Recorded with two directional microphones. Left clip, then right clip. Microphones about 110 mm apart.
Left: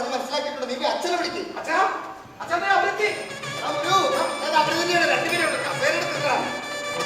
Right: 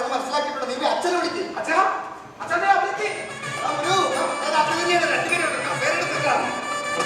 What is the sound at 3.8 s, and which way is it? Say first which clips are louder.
Music: left 1 dB; 45° right (ahead or behind).